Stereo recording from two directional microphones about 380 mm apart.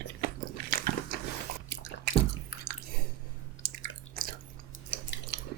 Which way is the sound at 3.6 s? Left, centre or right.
Right.